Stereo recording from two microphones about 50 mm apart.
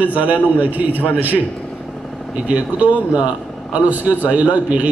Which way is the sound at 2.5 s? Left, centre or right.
Right.